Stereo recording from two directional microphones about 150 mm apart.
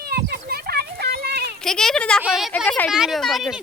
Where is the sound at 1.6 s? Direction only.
5° left (ahead or behind).